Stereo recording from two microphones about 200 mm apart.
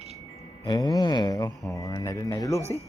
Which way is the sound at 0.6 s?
20° left (ahead or behind).